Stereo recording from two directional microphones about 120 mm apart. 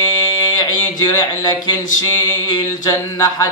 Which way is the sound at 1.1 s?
30° left (ahead or behind).